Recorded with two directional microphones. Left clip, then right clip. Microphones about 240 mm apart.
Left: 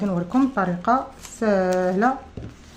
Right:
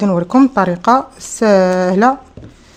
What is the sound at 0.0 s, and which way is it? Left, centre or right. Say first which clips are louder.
Speech: right 10 dB; right.